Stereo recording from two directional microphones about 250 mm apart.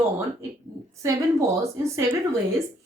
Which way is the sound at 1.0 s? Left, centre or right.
Centre.